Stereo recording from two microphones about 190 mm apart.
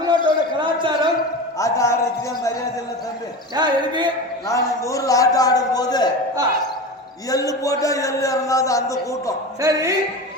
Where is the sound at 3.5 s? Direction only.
20° right (ahead or behind).